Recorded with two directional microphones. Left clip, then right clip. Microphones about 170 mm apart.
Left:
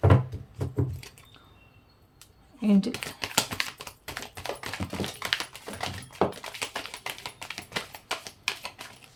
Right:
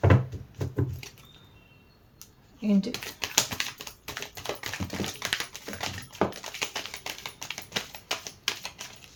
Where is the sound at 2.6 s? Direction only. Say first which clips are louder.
Left 2 dB; 30° left (ahead or behind).